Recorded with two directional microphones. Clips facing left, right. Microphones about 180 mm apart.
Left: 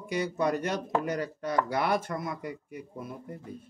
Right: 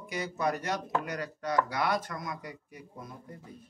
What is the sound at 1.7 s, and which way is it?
Speech, 30° left (ahead or behind).